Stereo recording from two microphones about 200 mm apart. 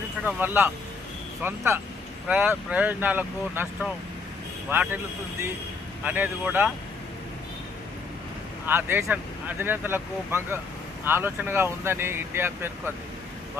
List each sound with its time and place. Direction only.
0.3 s speech: 10° right (ahead or behind)
6.1 s speech: 10° right (ahead or behind)
8.6 s speech: 10° right (ahead or behind)